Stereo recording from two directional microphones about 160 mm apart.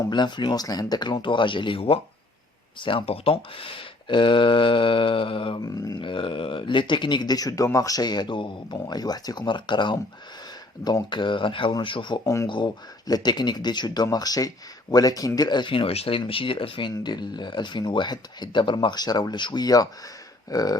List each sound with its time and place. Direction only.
0.1 s speech: 30° left (ahead or behind)
12.2 s speech: 20° left (ahead or behind)
12.5 s speech: 30° left (ahead or behind)